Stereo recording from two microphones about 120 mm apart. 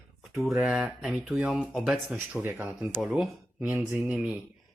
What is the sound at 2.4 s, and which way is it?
Speech, 15° right (ahead or behind).